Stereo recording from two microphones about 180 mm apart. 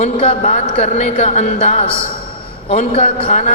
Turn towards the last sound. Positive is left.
turn(degrees=45)  # may be behind; listen again after turning